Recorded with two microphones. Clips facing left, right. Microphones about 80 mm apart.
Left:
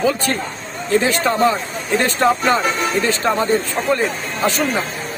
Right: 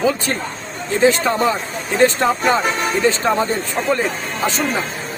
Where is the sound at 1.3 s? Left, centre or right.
Centre.